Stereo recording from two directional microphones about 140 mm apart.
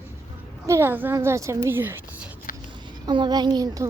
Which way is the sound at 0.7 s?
15° right (ahead or behind).